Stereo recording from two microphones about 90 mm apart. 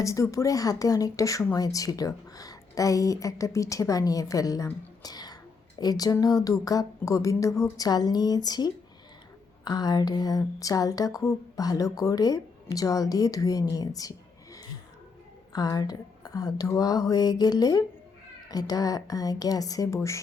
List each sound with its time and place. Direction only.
0.0 s speech: 35° left (ahead or behind)
15.5 s speech: 45° left (ahead or behind)